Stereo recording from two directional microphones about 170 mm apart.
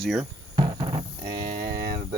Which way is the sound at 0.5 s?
25° right (ahead or behind).